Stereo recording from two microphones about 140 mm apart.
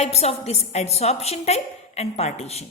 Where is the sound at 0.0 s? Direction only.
50° left (ahead or behind).